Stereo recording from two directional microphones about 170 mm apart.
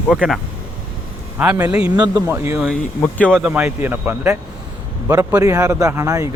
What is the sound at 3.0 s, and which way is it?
Speech, 10° left (ahead or behind).